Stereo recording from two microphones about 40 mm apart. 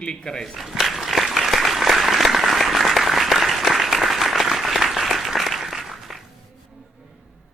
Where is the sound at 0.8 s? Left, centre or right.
Centre.